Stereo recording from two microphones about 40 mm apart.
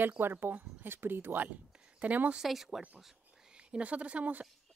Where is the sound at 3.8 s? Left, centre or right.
Right.